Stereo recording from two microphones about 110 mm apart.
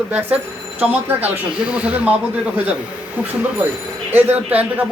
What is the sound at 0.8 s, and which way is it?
Speech, 15° right (ahead or behind).